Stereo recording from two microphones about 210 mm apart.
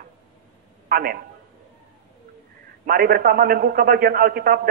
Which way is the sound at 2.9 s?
45° right (ahead or behind).